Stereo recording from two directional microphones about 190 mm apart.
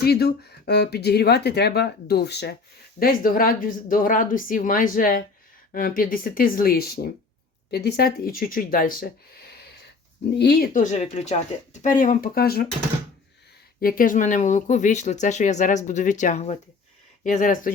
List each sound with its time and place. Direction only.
0.0 s speech: 55° left (ahead or behind)
3.0 s speech: 50° left (ahead or behind)
10.8 s speech: 40° left (ahead or behind); by 12.6 s 55° left (ahead or behind)
13.8 s speech: 45° left (ahead or behind)